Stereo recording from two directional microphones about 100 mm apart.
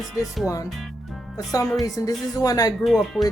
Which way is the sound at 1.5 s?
35° left (ahead or behind).